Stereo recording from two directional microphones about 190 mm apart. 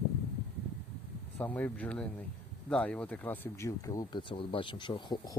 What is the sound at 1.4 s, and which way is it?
Speech, 10° left (ahead or behind).